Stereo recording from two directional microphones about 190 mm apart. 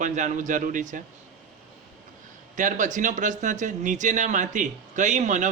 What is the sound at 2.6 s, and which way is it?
A man's voice, 40° right (ahead or behind).